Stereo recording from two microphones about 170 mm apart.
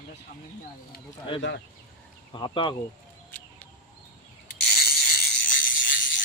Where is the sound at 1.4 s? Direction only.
90° left.